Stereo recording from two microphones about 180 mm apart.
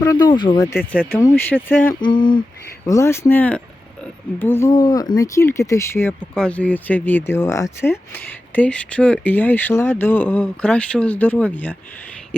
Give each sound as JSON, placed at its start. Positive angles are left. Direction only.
{"t": 0.0, "sound": "speech", "side_deg": 20}
{"t": 0.9, "sound": "speech", "side_deg": 10}
{"t": 2.0, "sound": "speech", "side_deg": 25}
{"t": 2.8, "sound": "speech", "side_deg": 15}